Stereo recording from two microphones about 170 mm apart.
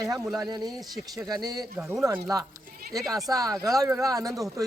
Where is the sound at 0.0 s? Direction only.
20° right (ahead or behind).